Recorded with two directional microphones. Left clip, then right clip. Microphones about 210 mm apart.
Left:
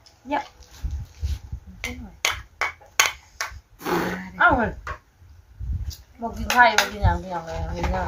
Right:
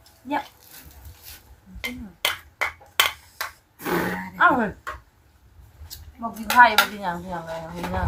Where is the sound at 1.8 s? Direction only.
10° left (ahead or behind).